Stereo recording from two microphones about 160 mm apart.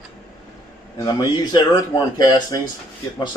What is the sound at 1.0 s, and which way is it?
A man's voice, 25° left (ahead or behind).